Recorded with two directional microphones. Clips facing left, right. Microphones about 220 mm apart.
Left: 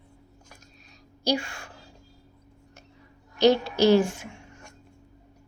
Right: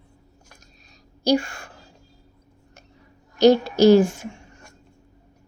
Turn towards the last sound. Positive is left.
turn(degrees=-40)  # may be behind; listen again after turning